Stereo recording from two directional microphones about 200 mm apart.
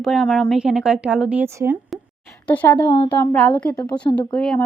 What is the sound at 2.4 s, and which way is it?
Speech, 10° left (ahead or behind).